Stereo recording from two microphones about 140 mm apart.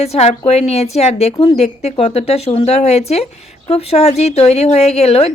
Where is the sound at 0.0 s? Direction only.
50° left (ahead or behind).